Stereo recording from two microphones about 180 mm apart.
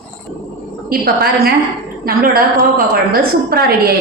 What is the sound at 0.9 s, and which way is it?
A woman's voice, 55° right (ahead or behind).